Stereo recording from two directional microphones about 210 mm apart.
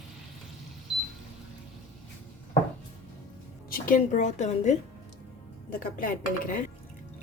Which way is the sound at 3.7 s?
40° left (ahead or behind).